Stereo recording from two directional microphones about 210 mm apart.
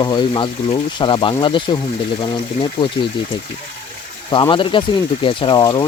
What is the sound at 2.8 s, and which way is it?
Speech, 25° left (ahead or behind).